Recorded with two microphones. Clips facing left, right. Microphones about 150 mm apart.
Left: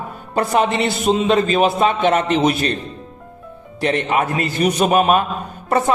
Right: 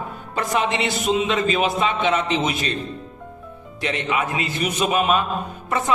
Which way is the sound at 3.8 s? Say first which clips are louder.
Left 6 dB; 45° left (ahead or behind).